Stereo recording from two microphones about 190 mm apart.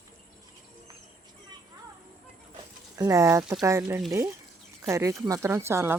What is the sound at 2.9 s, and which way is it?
Speech, 15° right (ahead or behind).